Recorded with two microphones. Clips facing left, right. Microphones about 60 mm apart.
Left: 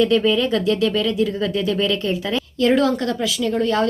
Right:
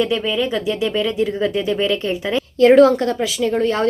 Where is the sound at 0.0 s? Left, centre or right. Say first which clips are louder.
Left 2 dB; centre.